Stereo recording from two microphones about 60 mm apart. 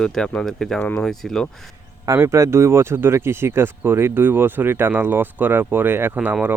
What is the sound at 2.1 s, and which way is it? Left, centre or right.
Speech, right.